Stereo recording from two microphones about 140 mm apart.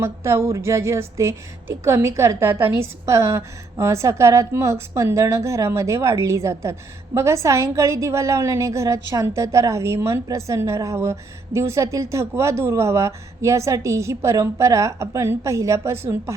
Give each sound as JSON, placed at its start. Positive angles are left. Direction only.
{"t": 0.0, "sound": "a woman's voice", "side_deg": -20}